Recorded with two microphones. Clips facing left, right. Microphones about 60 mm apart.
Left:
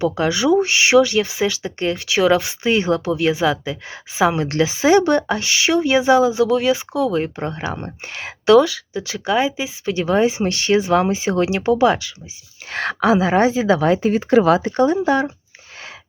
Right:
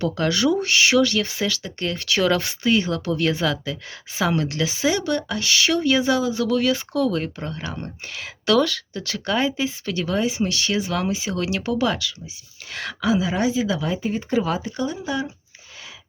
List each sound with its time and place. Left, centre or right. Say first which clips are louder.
0.0 s speech: left 3 dB; centre
2.6 s speech: left 3 dB; left
3.1 s speech: left 4 dB; centre
7.3 s speech: left 6 dB; left
8.4 s speech: left 7 dB; centre
12.7 s speech: left 6 dB; left
13.7 s speech: left 8 dB; left